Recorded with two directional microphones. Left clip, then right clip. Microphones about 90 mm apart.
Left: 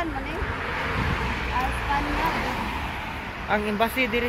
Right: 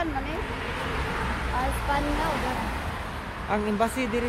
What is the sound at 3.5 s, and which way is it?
Speech, 30° right (ahead or behind).